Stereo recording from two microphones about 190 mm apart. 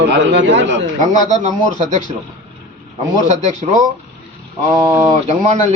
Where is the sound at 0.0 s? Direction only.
70° right (ahead or behind).